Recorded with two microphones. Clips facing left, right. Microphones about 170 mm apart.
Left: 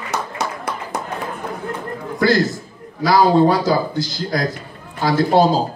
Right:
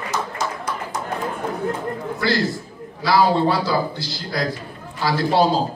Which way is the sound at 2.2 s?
45° left (ahead or behind).